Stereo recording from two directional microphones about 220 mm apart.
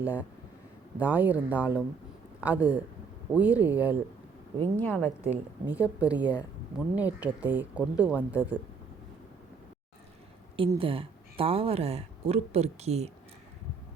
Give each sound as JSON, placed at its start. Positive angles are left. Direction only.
{"t": 0.0, "sound": "a woman's voice", "side_deg": -5}
{"t": 4.8, "sound": "a woman's voice", "side_deg": 10}
{"t": 5.2, "sound": "a woman's voice", "side_deg": -5}
{"t": 10.6, "sound": "speech", "side_deg": -25}